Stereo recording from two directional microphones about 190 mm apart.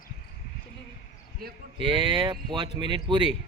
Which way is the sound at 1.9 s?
25° right (ahead or behind).